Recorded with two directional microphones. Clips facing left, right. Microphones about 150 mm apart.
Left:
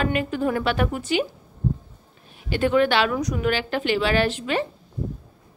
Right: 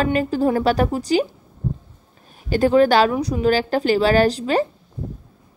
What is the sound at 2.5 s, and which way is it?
A woman's voice, 35° right (ahead or behind).